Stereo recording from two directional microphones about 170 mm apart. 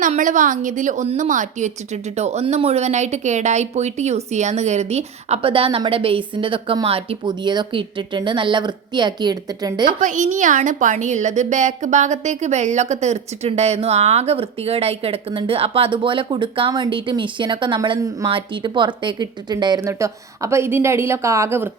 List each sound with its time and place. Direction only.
0.0 s a woman's voice: 50° right (ahead or behind); by 9.9 s 25° right (ahead or behind)
10.0 s a woman's voice: 50° right (ahead or behind); by 21.7 s 15° right (ahead or behind)